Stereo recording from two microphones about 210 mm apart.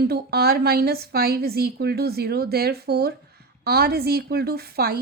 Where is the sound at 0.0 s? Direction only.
50° right (ahead or behind).